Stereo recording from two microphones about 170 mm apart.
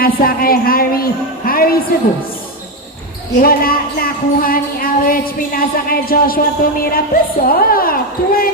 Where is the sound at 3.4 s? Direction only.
60° left (ahead or behind).